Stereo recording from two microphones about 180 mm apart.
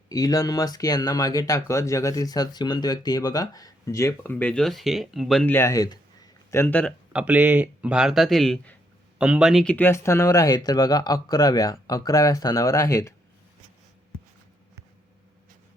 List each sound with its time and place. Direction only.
0.1 s speech: 20° left (ahead or behind)
7.1 s speech: 5° right (ahead or behind)
9.7 s speech: 15° left (ahead or behind)